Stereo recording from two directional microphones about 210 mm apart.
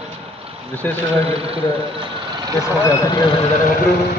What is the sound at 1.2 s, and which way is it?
Speech, 25° right (ahead or behind).